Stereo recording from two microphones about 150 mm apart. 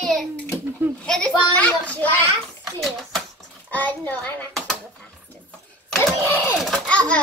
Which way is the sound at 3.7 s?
10° left (ahead or behind).